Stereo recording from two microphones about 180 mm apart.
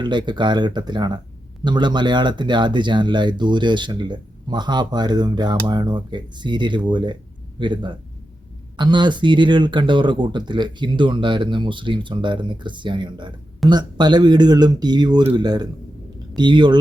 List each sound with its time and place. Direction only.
0.0 s speech: 25° right (ahead or behind)